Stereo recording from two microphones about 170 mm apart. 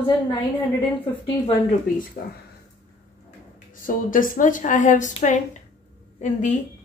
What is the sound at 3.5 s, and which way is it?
A woman's voice, 55° left (ahead or behind).